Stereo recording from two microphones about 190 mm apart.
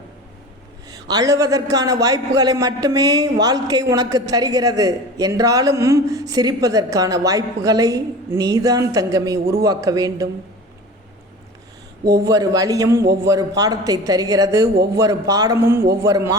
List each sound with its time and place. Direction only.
0.9 s a man's voice: 20° right (ahead or behind)
12.3 s a woman's voice: 20° right (ahead or behind)